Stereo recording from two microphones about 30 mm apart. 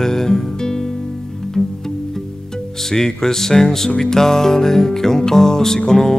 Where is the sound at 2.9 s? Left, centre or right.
Centre.